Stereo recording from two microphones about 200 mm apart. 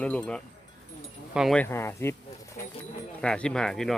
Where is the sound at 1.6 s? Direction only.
10° left (ahead or behind).